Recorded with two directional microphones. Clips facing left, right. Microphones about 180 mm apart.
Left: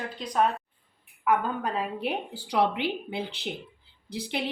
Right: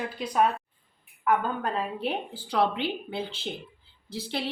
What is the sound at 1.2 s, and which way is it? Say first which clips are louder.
A woman's voice: even; 10° left (ahead or behind).